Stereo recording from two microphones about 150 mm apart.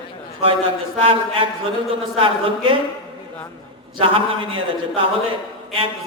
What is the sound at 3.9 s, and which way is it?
Speech, 35° right (ahead or behind).